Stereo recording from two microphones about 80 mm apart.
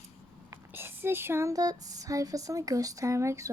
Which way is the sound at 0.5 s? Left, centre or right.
Right.